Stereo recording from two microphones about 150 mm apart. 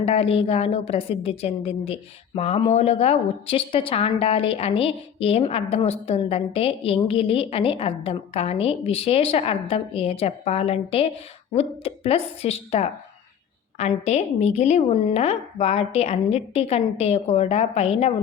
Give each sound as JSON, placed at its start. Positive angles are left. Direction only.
{"t": 0.0, "sound": "a woman's voice", "side_deg": 40}